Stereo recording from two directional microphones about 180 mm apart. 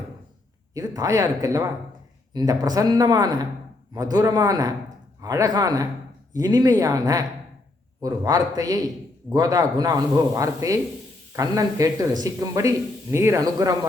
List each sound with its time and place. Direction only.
0.7 s speech: 20° right (ahead or behind)